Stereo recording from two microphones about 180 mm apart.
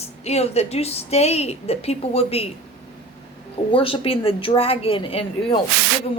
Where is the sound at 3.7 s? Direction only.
30° left (ahead or behind).